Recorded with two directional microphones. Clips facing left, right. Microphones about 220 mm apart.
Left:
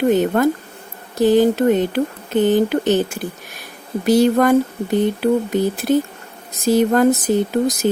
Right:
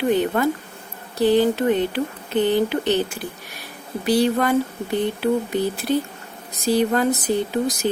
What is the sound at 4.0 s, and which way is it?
Speech, 45° left (ahead or behind).